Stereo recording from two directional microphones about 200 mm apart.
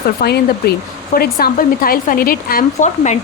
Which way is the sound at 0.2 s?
55° left (ahead or behind).